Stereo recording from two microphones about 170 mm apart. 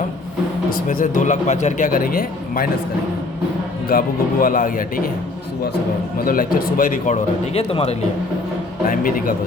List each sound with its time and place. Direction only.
0.9 s speech: 50° left (ahead or behind)
3.8 s a man's voice: 55° left (ahead or behind)
6.2 s speech: 55° left (ahead or behind); by 7.9 s 35° left (ahead or behind)
8.9 s a man's voice: 55° left (ahead or behind)